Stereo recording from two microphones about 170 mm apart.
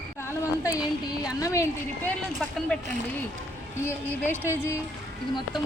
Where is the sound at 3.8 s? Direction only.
15° left (ahead or behind).